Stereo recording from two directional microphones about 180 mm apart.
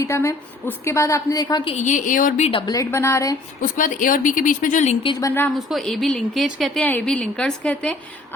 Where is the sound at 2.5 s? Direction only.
25° left (ahead or behind).